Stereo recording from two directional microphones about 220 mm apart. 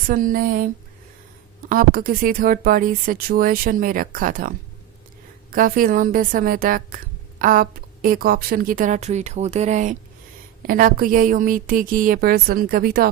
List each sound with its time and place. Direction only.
0.1 s a woman's voice: 40° right (ahead or behind)
1.7 s a woman's voice: 40° right (ahead or behind)